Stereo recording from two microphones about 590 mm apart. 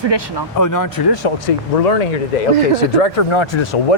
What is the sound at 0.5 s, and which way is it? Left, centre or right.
Speech, left.